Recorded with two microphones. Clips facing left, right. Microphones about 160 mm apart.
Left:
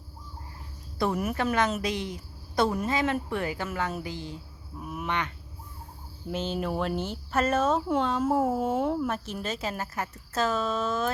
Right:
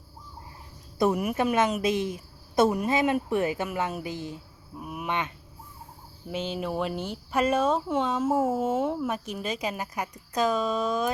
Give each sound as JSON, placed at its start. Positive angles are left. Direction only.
{"t": 0.9, "sound": "a woman's voice", "side_deg": -15}
{"t": 6.3, "sound": "a woman's voice", "side_deg": -5}